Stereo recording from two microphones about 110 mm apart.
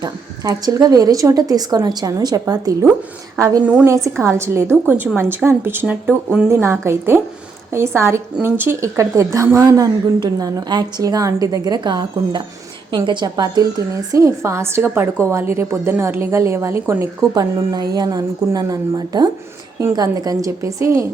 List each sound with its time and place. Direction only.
0.0 s a woman's voice: 35° right (ahead or behind); by 5.8 s 20° right (ahead or behind)
5.8 s speech: 10° right (ahead or behind)
6.5 s a woman's voice: 25° right (ahead or behind)